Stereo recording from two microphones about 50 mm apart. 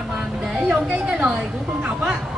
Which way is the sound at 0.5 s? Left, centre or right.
Right.